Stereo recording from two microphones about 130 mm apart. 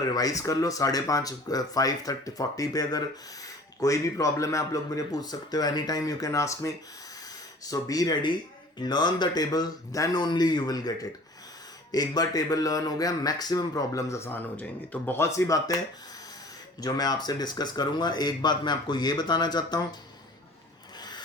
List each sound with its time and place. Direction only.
0.0 s speech: 30° left (ahead or behind)
16.8 s speech: 30° left (ahead or behind)